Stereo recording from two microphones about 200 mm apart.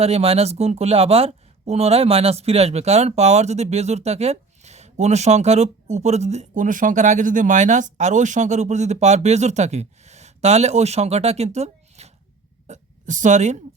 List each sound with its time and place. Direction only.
0.0 s a woman's voice: 30° right (ahead or behind)